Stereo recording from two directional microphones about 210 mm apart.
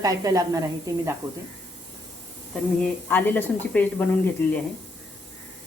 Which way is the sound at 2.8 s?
10° left (ahead or behind).